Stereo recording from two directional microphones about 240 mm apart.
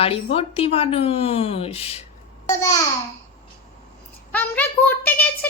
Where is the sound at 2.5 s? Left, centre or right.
Centre.